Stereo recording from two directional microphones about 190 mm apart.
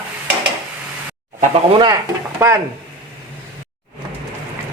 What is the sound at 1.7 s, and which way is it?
Speech, 20° right (ahead or behind).